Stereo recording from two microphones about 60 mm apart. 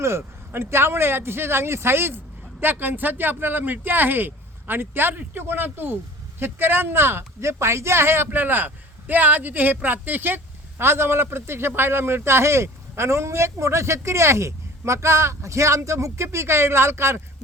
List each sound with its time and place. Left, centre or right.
0.0 s speech: right